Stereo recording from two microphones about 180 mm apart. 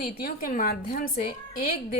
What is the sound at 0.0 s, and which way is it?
A woman's voice, 55° left (ahead or behind).